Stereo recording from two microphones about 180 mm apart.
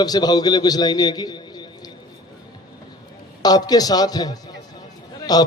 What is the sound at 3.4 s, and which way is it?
A man's voice, 20° left (ahead or behind).